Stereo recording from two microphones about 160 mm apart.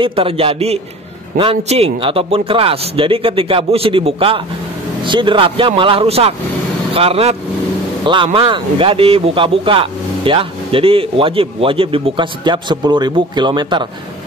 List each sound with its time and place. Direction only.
0.0 s speech: 35° right (ahead or behind)